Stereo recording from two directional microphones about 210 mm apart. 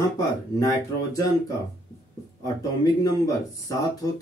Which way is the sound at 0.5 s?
15° left (ahead or behind).